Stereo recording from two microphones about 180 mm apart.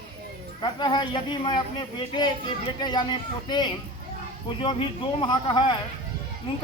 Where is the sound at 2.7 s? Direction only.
25° left (ahead or behind).